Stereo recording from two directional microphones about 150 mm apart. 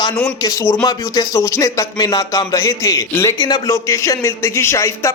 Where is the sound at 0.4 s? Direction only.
20° left (ahead or behind).